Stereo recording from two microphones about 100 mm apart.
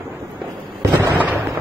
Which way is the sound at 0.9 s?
20° right (ahead or behind).